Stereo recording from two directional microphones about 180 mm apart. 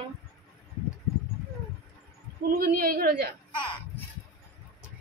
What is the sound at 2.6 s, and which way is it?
Speech, 55° right (ahead or behind).